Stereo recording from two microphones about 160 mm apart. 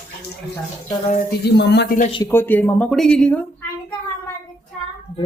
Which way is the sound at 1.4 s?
90° left.